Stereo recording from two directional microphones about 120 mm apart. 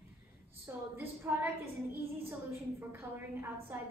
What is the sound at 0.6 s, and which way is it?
A woman's voice, 20° right (ahead or behind).